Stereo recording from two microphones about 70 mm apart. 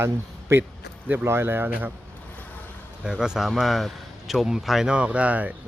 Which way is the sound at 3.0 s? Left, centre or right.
Centre.